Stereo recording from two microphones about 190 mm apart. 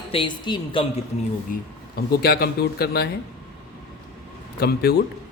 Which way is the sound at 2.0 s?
55° left (ahead or behind).